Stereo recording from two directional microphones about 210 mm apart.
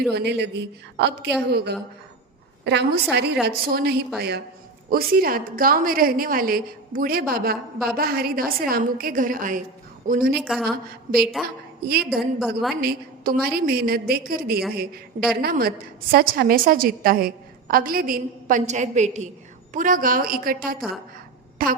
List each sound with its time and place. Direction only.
0.1 s a woman's voice: 50° right (ahead or behind)
10.3 s a woman's voice: centre (ahead or behind)
11.4 s a woman's voice: 45° right (ahead or behind)
12.1 s a woman's voice: centre (ahead or behind)
12.8 s a woman's voice: 45° right (ahead or behind)